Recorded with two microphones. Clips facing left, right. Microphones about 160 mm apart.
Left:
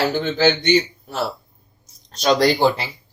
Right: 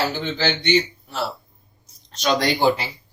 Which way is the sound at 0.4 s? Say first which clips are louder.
Left 3 dB; 45° left (ahead or behind).